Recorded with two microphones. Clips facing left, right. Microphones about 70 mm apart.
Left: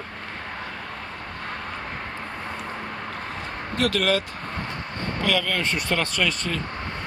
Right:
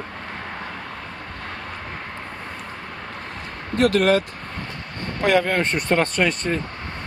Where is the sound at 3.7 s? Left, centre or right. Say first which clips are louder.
Right 6 dB; right.